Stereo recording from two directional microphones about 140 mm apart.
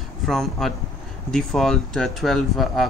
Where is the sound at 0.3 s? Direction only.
Centre (ahead or behind).